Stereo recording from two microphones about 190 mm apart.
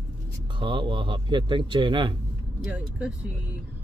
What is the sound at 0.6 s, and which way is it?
Speech, 25° right (ahead or behind).